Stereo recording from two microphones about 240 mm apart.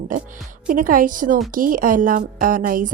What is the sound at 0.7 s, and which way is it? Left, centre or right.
Speech, right.